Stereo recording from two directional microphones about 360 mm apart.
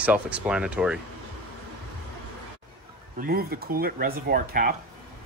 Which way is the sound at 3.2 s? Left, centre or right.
Right.